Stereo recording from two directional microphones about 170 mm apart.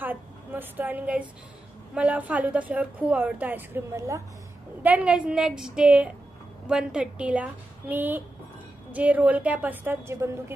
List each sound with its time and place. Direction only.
0.0 s a woman's voice: 10° right (ahead or behind)